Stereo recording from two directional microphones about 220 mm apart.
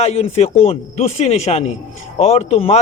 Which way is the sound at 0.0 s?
25° left (ahead or behind).